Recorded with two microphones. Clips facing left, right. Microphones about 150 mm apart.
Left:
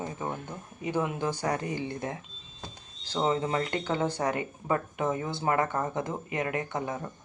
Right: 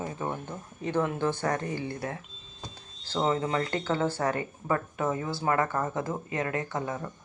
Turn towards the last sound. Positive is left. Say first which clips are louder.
# even
turn(degrees=20)  # may be behind; listen again after turning